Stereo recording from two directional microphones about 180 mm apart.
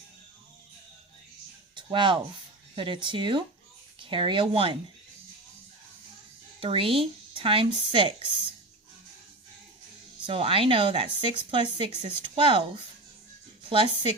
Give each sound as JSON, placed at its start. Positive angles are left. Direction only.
{"t": 1.7, "sound": "a sound", "side_deg": -25}
{"t": 2.7, "sound": "speech", "side_deg": -25}
{"t": 6.6, "sound": "speech", "side_deg": -30}
{"t": 10.2, "sound": "speech", "side_deg": -30}